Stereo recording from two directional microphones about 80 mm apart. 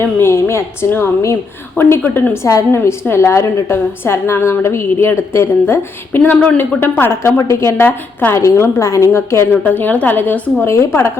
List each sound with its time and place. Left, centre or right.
0.0 s a woman's voice: left
8.4 s a woman's voice: left
9.6 s a woman's voice: left